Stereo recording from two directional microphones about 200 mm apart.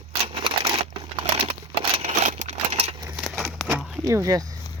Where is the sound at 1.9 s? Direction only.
30° right (ahead or behind).